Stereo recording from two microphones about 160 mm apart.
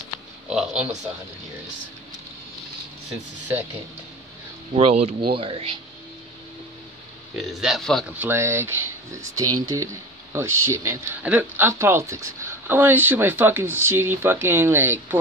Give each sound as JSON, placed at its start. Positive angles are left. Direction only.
{"t": 0.5, "sound": "speech", "side_deg": -5}
{"t": 3.1, "sound": "speech", "side_deg": -10}
{"t": 4.7, "sound": "speech", "side_deg": -40}
{"t": 7.3, "sound": "a man's voice", "side_deg": 0}
{"t": 8.2, "sound": "speech", "side_deg": -15}